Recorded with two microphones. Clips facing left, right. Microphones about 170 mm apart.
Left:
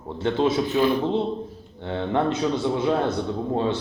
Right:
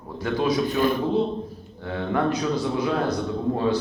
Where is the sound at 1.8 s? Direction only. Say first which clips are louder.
Left 1 dB; 25° left (ahead or behind).